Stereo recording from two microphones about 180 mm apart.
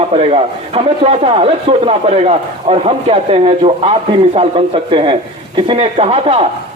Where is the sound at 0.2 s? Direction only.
35° right (ahead or behind).